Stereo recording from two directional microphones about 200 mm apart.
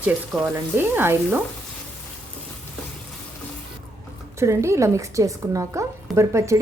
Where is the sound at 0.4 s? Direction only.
10° right (ahead or behind).